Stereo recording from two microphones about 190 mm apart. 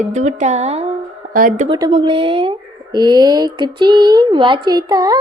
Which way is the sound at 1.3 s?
45° right (ahead or behind).